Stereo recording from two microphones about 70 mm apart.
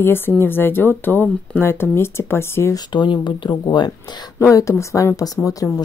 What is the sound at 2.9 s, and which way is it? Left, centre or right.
Speech, left.